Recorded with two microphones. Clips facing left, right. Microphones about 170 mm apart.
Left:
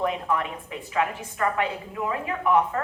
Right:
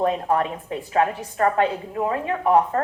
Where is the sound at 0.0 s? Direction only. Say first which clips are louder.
Right 5 dB; 35° right (ahead or behind).